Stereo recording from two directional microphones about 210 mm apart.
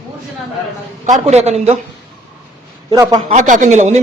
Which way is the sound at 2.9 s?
15° right (ahead or behind).